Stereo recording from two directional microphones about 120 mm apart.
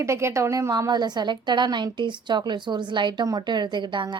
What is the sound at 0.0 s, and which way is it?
A woman's voice, 25° right (ahead or behind).